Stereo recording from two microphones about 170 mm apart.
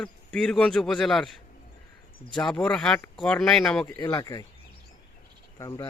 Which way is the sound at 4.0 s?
20° left (ahead or behind).